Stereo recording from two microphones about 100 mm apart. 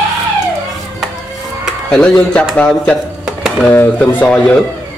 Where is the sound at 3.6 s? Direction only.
15° left (ahead or behind).